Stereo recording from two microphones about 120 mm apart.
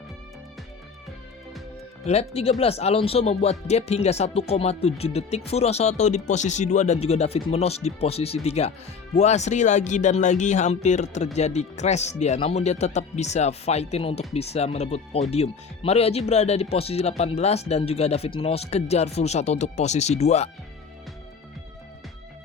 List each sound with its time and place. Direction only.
2.0 s speech: 60° left (ahead or behind)